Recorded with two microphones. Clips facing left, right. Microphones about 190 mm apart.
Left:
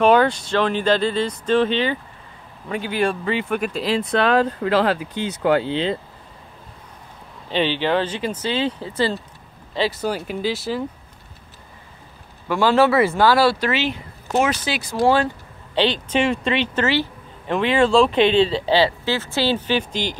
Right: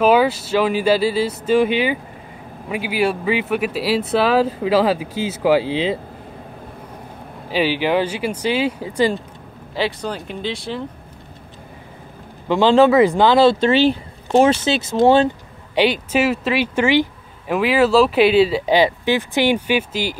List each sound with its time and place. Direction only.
0.0 s speech: 5° right (ahead or behind)
7.5 s speech: 10° right (ahead or behind)
9.8 s speech: 5° left (ahead or behind)
12.4 s speech: 20° right (ahead or behind)
15.7 s speech: 10° right (ahead or behind)